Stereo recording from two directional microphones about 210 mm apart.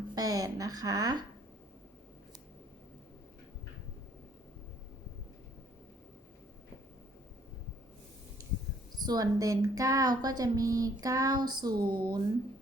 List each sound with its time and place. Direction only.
0.1 s a woman's voice: 15° right (ahead or behind)
8.4 s a sound: 15° right (ahead or behind)
9.0 s a woman's voice: 20° right (ahead or behind)